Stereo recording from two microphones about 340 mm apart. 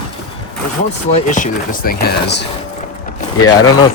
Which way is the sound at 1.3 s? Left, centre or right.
Left.